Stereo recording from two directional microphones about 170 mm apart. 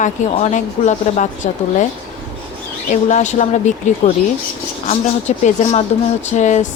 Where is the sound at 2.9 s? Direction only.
45° left (ahead or behind).